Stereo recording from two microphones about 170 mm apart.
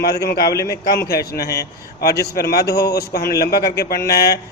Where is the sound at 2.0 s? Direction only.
65° left (ahead or behind).